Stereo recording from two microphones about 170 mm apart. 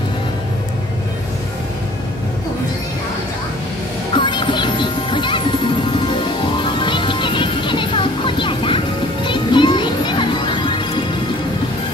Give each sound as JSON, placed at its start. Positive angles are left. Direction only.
{"t": 4.1, "sound": "music", "side_deg": 30}